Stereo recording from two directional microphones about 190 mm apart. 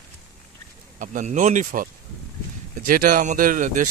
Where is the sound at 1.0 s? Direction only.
40° right (ahead or behind).